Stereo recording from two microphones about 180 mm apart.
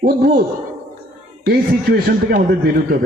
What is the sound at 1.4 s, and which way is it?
Speech, 60° right (ahead or behind).